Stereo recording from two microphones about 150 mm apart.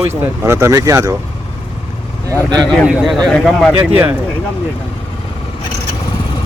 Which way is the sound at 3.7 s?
15° right (ahead or behind).